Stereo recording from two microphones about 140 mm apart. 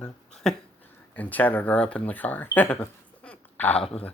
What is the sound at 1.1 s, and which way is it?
Speech, 10° left (ahead or behind).